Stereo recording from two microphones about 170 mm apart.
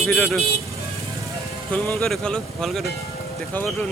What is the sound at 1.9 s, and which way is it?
Speech, centre (ahead or behind).